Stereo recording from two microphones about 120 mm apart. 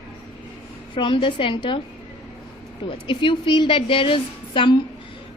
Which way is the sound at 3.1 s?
45° left (ahead or behind).